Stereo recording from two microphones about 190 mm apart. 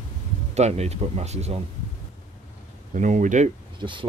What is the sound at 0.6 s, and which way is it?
Speech, 35° right (ahead or behind).